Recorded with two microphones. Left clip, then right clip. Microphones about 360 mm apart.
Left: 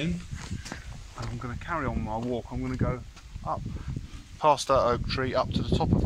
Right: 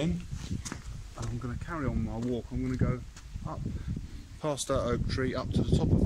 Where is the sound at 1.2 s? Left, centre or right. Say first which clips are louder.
Left 3 dB; centre.